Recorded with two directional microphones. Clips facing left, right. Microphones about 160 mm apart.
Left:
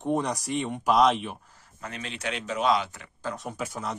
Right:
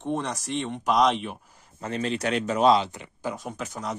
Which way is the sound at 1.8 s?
35° right (ahead or behind).